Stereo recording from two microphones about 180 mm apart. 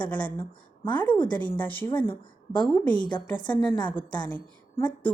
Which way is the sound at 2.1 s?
25° left (ahead or behind).